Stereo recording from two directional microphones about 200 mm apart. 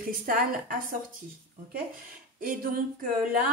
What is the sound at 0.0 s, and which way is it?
Speech, 45° right (ahead or behind).